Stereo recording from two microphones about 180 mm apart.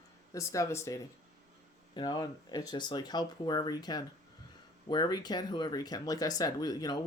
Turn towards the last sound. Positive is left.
turn(degrees=20)  # may be behind; listen again after turning